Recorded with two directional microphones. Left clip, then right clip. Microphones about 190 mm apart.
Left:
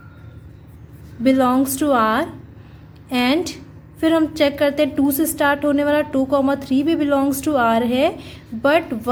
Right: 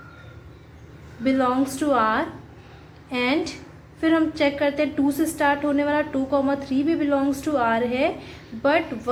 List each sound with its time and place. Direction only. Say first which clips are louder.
1.2 s a woman's voice: left 5 dB; 40° left (ahead or behind)